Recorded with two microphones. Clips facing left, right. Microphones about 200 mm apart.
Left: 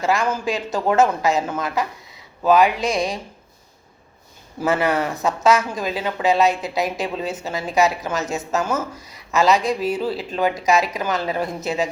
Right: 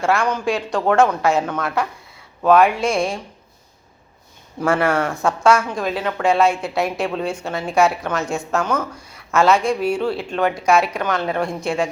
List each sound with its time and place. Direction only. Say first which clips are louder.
0.0 s speech: right 2 dB; centre (ahead or behind)
4.6 s speech: right 2 dB; 5° left (ahead or behind)
8.8 s speech: right 1 dB; 20° left (ahead or behind)
9.1 s speech: right 2 dB; centre (ahead or behind)